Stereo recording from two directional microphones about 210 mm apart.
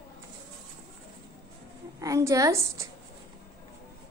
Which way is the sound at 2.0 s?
15° right (ahead or behind).